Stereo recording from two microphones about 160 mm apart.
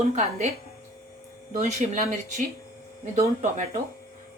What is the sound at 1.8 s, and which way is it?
Speech, 50° right (ahead or behind).